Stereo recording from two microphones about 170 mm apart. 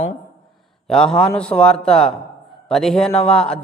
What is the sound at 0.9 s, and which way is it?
A man's voice, 5° left (ahead or behind).